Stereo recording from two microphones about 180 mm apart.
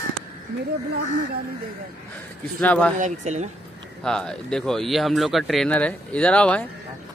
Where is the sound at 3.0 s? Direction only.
40° right (ahead or behind).